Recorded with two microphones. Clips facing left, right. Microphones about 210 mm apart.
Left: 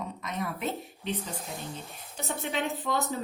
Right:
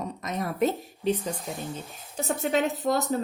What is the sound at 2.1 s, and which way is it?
Speech, 45° right (ahead or behind).